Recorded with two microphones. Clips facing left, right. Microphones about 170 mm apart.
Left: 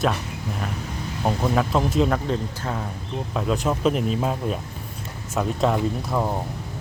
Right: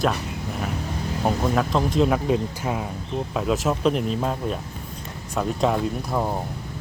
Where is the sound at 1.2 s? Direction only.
Centre (ahead or behind).